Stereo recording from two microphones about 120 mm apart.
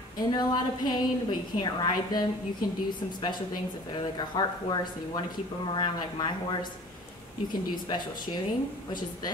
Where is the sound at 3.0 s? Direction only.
45° left (ahead or behind).